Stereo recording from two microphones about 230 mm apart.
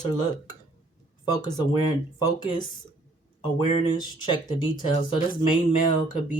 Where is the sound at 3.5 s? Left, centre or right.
Centre.